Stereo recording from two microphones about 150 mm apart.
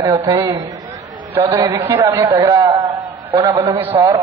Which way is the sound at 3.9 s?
20° right (ahead or behind).